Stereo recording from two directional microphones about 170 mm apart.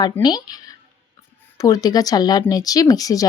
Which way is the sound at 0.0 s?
25° left (ahead or behind).